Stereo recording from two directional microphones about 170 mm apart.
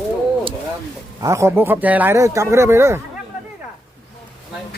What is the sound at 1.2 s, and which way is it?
Speech, 15° right (ahead or behind).